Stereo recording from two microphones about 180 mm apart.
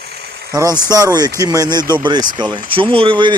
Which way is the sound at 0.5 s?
20° right (ahead or behind).